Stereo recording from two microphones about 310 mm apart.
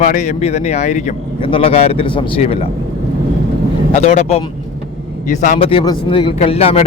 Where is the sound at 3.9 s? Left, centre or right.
Left.